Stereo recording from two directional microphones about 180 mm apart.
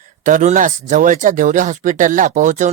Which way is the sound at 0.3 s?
45° right (ahead or behind).